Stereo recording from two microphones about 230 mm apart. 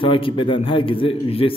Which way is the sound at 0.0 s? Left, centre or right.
Left.